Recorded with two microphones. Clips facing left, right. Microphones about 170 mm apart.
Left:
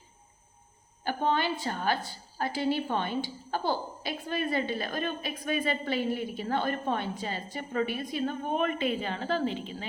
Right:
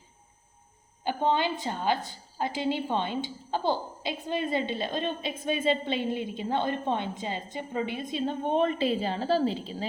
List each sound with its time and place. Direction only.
1.0 s a woman's voice: 20° right (ahead or behind); by 9.8 s 35° right (ahead or behind)